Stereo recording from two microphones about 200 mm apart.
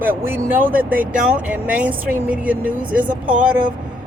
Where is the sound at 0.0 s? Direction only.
10° right (ahead or behind).